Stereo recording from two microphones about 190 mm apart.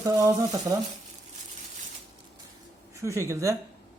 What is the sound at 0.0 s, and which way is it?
Speech, 15° right (ahead or behind).